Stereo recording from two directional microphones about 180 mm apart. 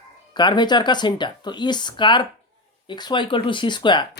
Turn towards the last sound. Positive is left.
turn(degrees=25)  # may be behind; listen again after turning